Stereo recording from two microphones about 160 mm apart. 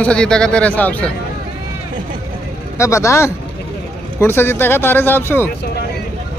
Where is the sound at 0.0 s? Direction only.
5° left (ahead or behind).